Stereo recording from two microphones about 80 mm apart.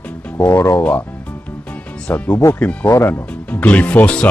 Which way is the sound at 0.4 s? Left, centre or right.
Left.